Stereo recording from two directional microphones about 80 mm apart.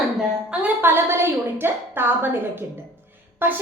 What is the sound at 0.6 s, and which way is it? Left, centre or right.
A woman's voice, right.